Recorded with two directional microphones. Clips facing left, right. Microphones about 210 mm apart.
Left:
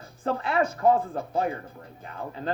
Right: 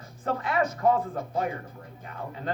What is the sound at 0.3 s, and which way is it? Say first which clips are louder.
Speech: left 2 dB; 30° left (ahead or behind).